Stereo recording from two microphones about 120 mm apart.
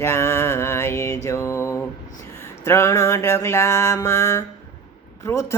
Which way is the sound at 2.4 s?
20° left (ahead or behind).